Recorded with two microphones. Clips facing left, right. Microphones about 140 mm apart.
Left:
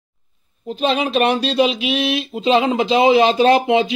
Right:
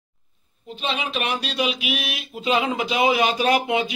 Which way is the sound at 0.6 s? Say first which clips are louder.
Left 9 dB; 40° left (ahead or behind).